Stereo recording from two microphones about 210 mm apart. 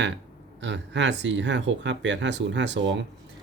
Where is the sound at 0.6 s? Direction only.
55° right (ahead or behind).